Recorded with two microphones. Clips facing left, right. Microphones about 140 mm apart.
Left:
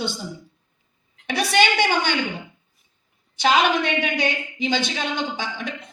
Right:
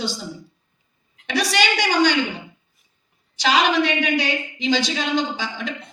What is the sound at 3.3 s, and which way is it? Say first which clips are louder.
A woman's voice: even; 55° left (ahead or behind).